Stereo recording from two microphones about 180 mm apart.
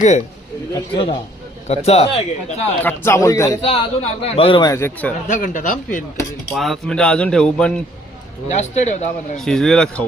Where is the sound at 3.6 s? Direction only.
35° left (ahead or behind).